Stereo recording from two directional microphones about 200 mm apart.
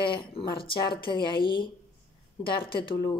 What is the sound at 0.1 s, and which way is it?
Speech, 25° left (ahead or behind).